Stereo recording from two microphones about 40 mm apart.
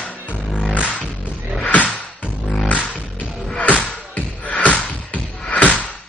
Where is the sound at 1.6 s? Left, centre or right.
Left.